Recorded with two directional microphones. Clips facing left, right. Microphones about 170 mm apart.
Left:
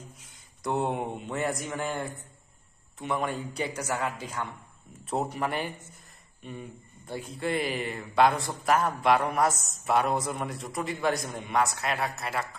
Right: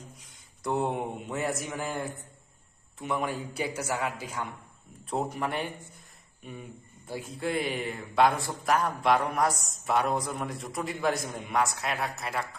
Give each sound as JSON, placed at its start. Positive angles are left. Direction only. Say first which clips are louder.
{"t": 0.2, "sound": "a man's voice", "louder": "left 1 dB", "side_deg": 0}
{"t": 5.1, "sound": "speech", "louder": "left 1 dB", "side_deg": 0}